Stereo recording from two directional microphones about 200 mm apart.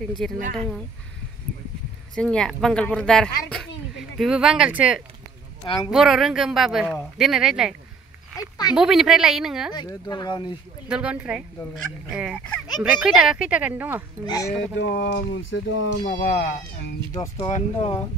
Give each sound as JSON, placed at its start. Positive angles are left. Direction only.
{"t": 0.4, "sound": "speech", "side_deg": -40}
{"t": 2.1, "sound": "speech", "side_deg": 5}
{"t": 8.4, "sound": "speech", "side_deg": 20}
{"t": 8.7, "sound": "speech", "side_deg": 0}
{"t": 9.8, "sound": "speech", "side_deg": 20}
{"t": 10.9, "sound": "speech", "side_deg": -5}
{"t": 14.2, "sound": "speech", "side_deg": 20}
{"t": 14.8, "sound": "speech", "side_deg": 55}
{"t": 16.0, "sound": "speech", "side_deg": 45}
{"t": 17.1, "sound": "speech", "side_deg": 15}
{"t": 17.5, "sound": "speech", "side_deg": 35}